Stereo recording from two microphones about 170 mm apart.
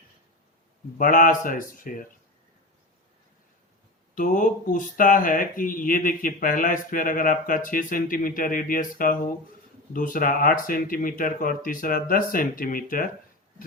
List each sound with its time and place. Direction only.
0.9 s speech: 55° left (ahead or behind)
4.1 s speech: 55° left (ahead or behind)